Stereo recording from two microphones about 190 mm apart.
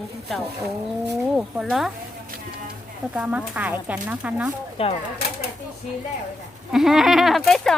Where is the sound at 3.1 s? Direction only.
5° right (ahead or behind).